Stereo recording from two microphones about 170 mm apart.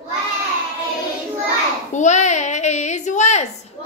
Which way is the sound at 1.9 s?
45° left (ahead or behind).